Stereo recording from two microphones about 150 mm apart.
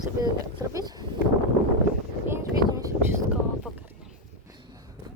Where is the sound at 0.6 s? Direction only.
25° right (ahead or behind).